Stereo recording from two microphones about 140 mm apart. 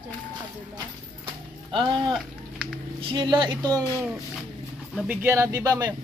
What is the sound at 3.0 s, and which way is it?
Speech, 35° right (ahead or behind).